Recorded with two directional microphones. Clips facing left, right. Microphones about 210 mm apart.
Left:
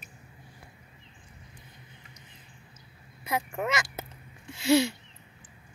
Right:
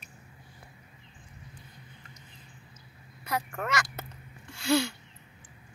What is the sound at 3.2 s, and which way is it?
Speech, 20° left (ahead or behind).